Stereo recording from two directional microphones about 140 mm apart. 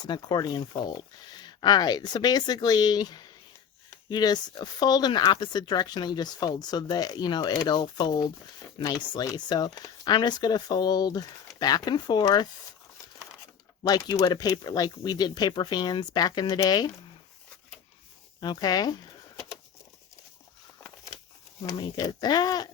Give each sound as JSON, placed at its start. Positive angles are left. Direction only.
{"t": 0.0, "sound": "speech", "side_deg": 30}
{"t": 13.8, "sound": "speech", "side_deg": 30}
{"t": 18.3, "sound": "speech", "side_deg": 30}
{"t": 21.7, "sound": "speech", "side_deg": 30}